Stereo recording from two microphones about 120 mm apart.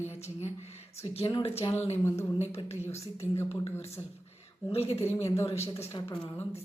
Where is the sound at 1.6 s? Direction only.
45° left (ahead or behind).